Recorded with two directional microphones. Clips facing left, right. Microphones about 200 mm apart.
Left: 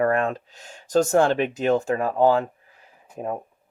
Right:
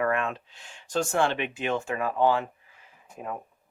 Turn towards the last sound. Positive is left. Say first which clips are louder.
# left 7 dB
turn(degrees=35)  # may be behind; listen again after turning